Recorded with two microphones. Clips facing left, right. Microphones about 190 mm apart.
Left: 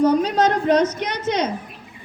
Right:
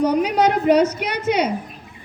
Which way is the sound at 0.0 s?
10° right (ahead or behind).